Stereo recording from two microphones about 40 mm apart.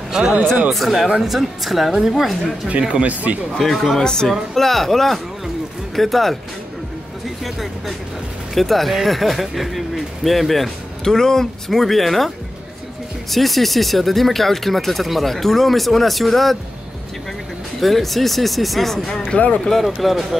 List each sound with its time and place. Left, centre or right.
0.1 s speech: centre
0.7 s a woman's voice: centre
2.8 s speech: right
3.5 s speech: centre
4.0 s speech: centre
4.3 s speech: centre
7.4 s speech: centre
11.1 s speech: centre
11.7 s speech: centre
13.3 s speech: centre
17.7 s speech: centre
19.3 s speech: left
20.0 s speech: centre